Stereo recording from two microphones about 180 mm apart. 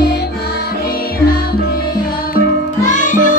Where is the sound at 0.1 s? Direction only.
65° left (ahead or behind).